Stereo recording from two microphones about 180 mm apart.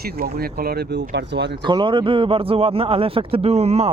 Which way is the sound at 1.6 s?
25° right (ahead or behind).